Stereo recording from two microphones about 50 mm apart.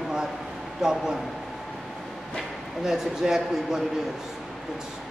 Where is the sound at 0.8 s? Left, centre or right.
Centre.